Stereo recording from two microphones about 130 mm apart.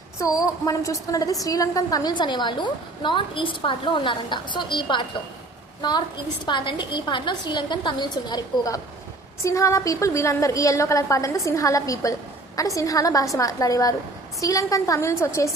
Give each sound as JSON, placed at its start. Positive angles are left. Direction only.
{"t": 0.2, "sound": "a woman's voice", "side_deg": 25}